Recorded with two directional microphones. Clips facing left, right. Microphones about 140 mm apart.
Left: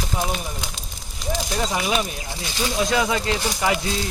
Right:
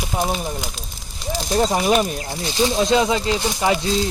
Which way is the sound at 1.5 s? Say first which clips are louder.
Right 8 dB; 35° right (ahead or behind).